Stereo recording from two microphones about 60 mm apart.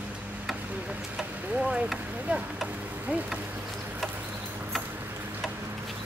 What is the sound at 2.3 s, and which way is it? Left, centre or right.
Speech, right.